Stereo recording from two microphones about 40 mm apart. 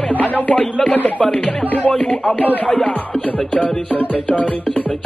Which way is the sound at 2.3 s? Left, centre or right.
Left.